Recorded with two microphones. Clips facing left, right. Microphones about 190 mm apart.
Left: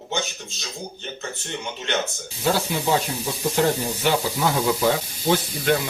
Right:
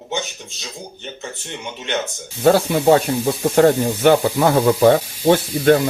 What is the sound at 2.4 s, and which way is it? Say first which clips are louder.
Speech: right 9 dB; 65° right (ahead or behind).